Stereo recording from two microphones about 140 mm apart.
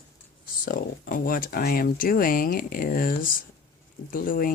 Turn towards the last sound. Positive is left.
turn(degrees=90)